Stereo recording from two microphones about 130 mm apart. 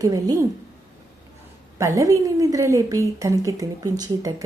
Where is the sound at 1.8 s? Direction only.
25° right (ahead or behind).